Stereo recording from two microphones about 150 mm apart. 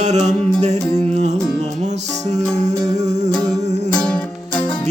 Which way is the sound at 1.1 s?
50° right (ahead or behind).